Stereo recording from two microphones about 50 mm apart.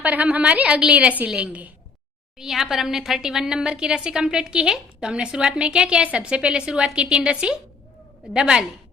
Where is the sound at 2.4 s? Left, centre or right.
Centre.